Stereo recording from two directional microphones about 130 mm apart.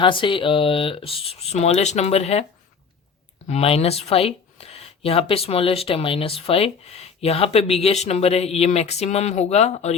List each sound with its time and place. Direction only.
0.0 s speech: 40° left (ahead or behind)
3.4 s speech: 50° left (ahead or behind)